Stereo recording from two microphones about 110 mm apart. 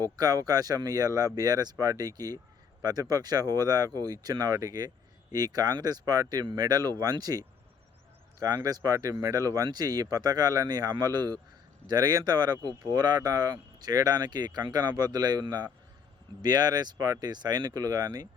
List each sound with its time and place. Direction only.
0.0 s speech: 35° right (ahead or behind)